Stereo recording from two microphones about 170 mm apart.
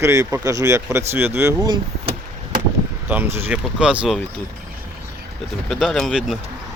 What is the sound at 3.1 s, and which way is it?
Speech, 10° right (ahead or behind).